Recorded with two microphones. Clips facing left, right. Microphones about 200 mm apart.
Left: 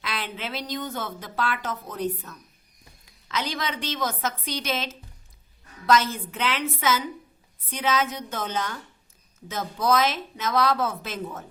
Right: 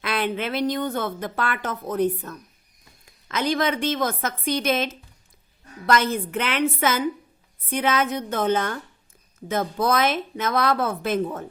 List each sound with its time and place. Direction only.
0.0 s a woman's voice: 55° right (ahead or behind)